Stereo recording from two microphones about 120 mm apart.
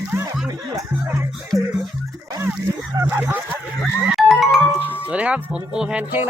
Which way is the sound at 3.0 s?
20° right (ahead or behind).